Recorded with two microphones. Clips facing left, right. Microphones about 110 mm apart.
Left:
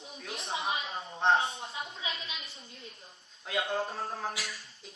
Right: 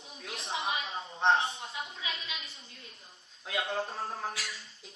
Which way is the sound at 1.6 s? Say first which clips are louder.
Left 1 dB; 30° left (ahead or behind).